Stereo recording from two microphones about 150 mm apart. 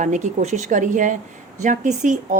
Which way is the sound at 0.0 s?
55° right (ahead or behind).